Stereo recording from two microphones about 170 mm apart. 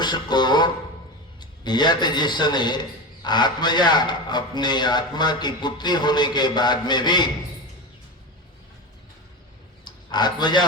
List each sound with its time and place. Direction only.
0.0 s a man's voice: 25° left (ahead or behind)
9.8 s speech: 25° left (ahead or behind)